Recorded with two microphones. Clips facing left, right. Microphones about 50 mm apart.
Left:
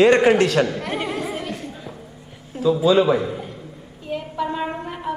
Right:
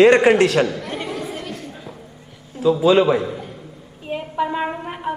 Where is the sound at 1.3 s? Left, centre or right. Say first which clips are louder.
Left 2 dB; centre.